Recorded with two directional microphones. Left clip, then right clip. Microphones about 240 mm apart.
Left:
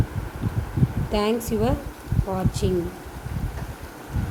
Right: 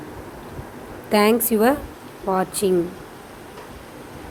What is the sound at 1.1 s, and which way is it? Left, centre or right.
A woman's voice, centre.